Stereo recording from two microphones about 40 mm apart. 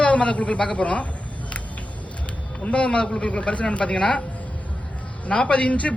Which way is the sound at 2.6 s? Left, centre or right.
Left.